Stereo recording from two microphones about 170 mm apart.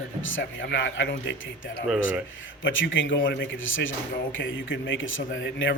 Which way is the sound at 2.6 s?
90° left.